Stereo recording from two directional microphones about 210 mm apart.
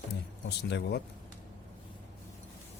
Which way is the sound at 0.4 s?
55° left (ahead or behind).